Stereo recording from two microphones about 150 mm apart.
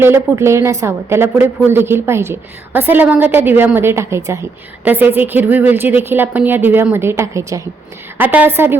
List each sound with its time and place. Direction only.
0.0 s a woman's voice: 15° right (ahead or behind)